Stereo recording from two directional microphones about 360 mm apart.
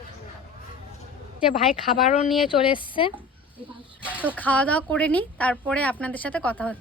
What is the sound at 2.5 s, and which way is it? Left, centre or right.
Speech, centre.